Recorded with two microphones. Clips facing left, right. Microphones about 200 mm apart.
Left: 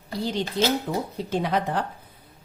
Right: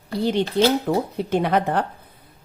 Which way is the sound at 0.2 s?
60° right (ahead or behind).